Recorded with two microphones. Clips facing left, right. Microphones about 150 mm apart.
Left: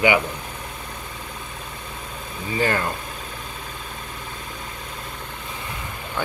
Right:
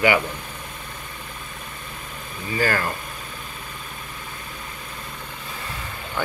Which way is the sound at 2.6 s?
25° left (ahead or behind).